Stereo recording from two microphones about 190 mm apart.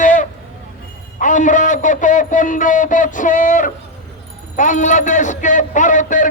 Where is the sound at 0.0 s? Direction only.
40° left (ahead or behind).